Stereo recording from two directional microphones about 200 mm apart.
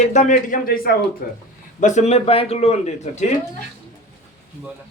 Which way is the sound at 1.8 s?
35° left (ahead or behind).